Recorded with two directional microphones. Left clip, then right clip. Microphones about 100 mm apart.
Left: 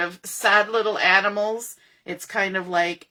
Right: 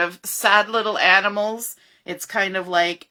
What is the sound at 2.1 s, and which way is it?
Speech, 35° right (ahead or behind).